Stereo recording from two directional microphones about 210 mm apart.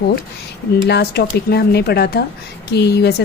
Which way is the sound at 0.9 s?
50° left (ahead or behind).